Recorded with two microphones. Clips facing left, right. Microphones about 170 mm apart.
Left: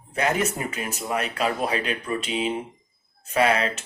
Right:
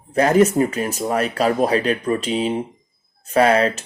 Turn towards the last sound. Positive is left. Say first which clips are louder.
# right 6 dB
turn(degrees=-40)  # may be behind; listen again after turning